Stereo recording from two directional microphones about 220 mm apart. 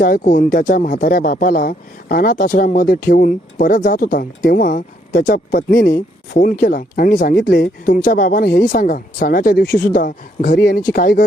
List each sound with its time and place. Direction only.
0.0 s speech: 40° left (ahead or behind)